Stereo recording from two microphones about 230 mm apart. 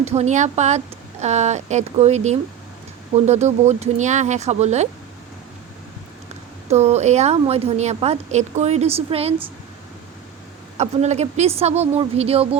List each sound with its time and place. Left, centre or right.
0.0 s a woman's voice: right
6.7 s a woman's voice: right
10.8 s a woman's voice: right